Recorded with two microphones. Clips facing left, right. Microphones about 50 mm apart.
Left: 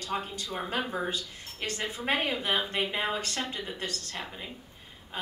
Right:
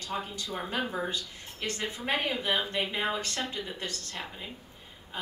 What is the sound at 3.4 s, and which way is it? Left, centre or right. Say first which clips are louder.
Speech: even; centre.